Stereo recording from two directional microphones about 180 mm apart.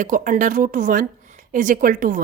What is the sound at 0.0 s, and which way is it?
Speech, 45° right (ahead or behind).